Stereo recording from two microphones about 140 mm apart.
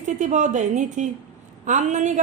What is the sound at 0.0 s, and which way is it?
A woman's voice, 60° right (ahead or behind).